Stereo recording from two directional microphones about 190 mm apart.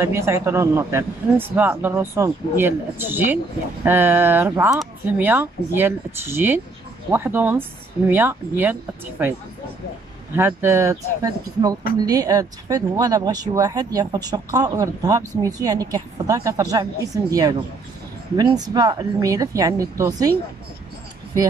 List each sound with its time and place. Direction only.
0.0 s speech: 15° right (ahead or behind)
10.3 s speech: 10° right (ahead or behind)